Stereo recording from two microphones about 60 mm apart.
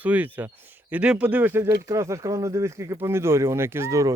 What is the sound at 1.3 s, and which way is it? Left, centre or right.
Speech, right.